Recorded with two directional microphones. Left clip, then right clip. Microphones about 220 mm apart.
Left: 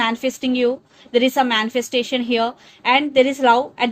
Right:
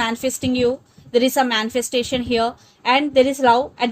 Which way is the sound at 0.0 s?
30° right (ahead or behind).